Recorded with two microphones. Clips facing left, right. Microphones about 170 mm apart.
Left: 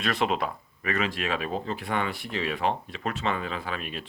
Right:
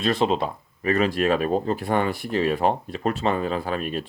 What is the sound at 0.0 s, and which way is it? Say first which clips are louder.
Speech: right 5 dB; 30° right (ahead or behind).